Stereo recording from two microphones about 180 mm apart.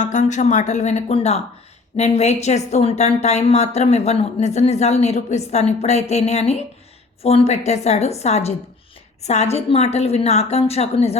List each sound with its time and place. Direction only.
0.0 s speech: 40° left (ahead or behind)